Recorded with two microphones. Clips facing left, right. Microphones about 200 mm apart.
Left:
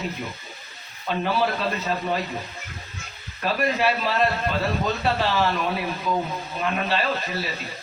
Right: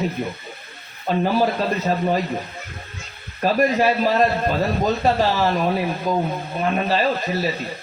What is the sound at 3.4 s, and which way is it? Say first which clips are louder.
Speech: right 5 dB; 40° right (ahead or behind).